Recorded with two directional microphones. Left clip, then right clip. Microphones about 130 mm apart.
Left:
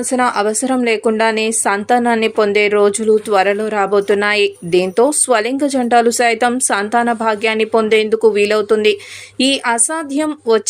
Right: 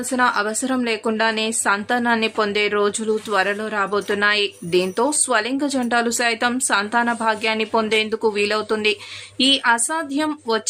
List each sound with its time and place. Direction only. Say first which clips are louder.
0.1 s speech: left 4 dB; 30° left (ahead or behind)